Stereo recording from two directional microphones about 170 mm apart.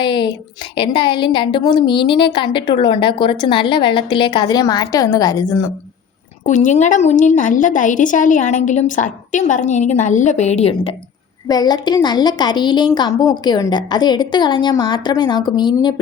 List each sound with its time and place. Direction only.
0.0 s a woman's voice: 25° left (ahead or behind)
6.4 s a woman's voice: 45° left (ahead or behind)
11.4 s a woman's voice: 25° left (ahead or behind)